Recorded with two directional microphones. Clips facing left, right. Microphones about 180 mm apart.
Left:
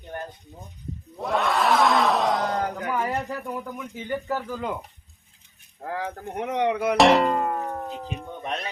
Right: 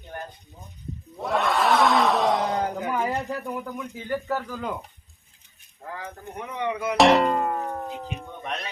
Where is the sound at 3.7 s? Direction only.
10° left (ahead or behind).